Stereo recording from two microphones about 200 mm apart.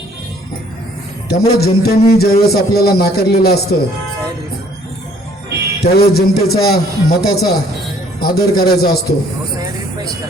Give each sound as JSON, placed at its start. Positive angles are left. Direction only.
{"t": 1.3, "sound": "a man's voice", "side_deg": 50}
{"t": 5.8, "sound": "a man's voice", "side_deg": 50}